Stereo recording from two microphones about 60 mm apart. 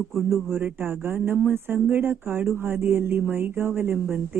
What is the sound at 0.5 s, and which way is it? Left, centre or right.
Speech, right.